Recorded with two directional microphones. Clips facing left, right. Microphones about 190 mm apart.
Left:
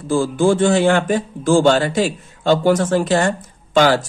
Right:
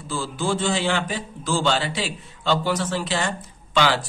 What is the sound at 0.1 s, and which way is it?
Speech, 50° left (ahead or behind).